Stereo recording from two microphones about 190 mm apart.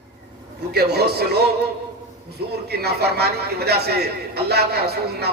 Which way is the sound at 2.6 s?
55° right (ahead or behind).